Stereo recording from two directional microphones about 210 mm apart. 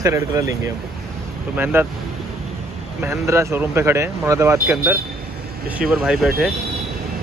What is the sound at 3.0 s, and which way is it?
Speech, 15° right (ahead or behind).